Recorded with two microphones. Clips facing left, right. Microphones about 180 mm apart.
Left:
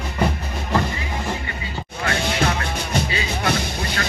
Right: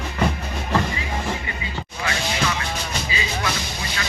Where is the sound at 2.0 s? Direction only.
60° left (ahead or behind).